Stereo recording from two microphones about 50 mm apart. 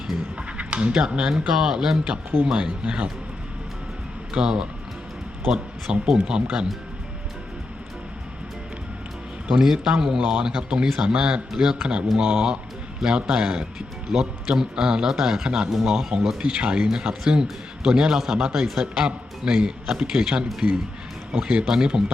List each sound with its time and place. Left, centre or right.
0.3 s a man's voice: right
4.4 s a man's voice: centre
9.5 s a man's voice: centre
16.4 s a man's voice: right
21.7 s a man's voice: centre